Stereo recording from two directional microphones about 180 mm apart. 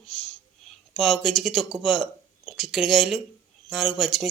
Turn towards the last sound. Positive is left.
turn(degrees=0)  # may be behind; listen again after turning